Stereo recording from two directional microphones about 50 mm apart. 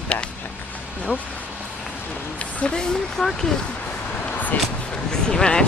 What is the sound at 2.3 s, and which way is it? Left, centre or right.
Speech, centre.